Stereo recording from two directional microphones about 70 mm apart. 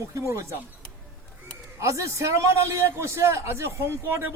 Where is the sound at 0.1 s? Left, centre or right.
Right.